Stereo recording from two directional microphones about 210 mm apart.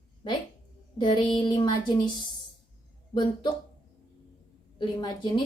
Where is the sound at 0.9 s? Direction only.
20° left (ahead or behind).